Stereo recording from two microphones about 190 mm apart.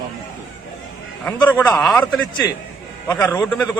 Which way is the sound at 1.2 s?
10° left (ahead or behind).